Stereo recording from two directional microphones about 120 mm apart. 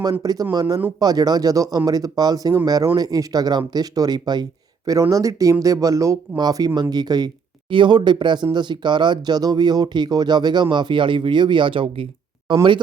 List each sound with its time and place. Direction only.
0.0 s speech: 30° right (ahead or behind)